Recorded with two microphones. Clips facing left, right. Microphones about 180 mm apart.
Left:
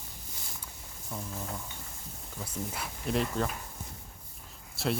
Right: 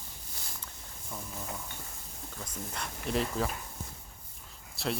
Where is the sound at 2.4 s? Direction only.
5° left (ahead or behind).